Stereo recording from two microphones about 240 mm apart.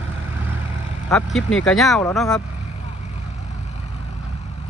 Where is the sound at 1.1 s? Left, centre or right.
Centre.